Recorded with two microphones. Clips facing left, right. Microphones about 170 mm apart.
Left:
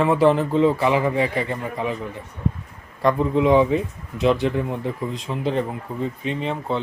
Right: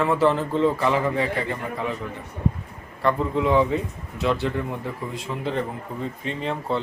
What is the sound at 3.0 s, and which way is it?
A man's voice, 15° left (ahead or behind).